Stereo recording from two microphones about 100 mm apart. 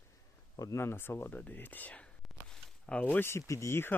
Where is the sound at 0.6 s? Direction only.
30° left (ahead or behind); by 2.1 s 15° left (ahead or behind).